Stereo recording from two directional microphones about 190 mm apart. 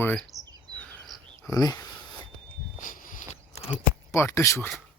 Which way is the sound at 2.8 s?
45° left (ahead or behind).